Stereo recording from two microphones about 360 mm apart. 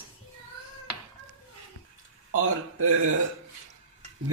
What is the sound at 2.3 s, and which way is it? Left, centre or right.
Speech, right.